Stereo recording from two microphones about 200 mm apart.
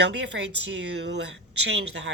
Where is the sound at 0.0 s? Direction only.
60° right (ahead or behind).